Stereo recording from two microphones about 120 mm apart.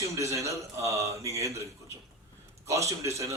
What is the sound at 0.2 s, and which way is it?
A man's voice, 25° right (ahead or behind).